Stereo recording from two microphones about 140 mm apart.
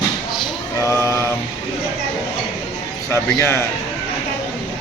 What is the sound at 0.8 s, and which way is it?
Speech, 20° left (ahead or behind).